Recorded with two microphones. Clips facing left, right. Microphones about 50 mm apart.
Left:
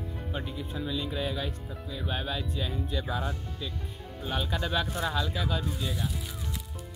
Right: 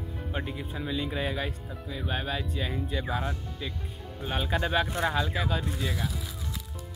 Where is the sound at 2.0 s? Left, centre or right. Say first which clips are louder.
Right 1 dB; centre.